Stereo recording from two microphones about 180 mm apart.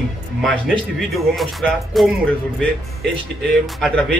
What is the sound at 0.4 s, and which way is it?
Speech, centre (ahead or behind).